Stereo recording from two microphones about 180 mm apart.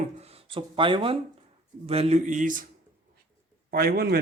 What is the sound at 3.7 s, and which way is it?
Speech, 55° right (ahead or behind).